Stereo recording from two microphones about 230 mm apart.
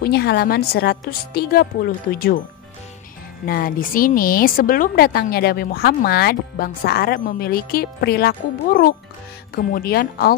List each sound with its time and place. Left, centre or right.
0.0 s speech: left
3.4 s a woman's voice: left